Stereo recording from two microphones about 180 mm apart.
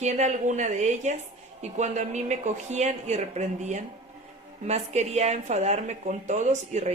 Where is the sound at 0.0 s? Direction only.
40° right (ahead or behind).